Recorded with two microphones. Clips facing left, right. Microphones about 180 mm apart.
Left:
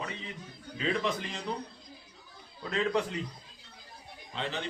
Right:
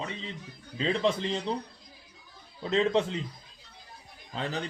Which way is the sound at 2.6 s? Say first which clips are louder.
Right 4 dB; 25° right (ahead or behind).